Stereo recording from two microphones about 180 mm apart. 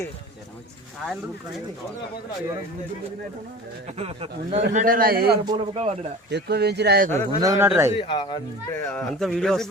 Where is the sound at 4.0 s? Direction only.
30° right (ahead or behind).